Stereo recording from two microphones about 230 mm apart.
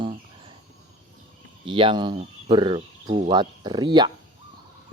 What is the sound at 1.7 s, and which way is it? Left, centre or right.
Speech, right.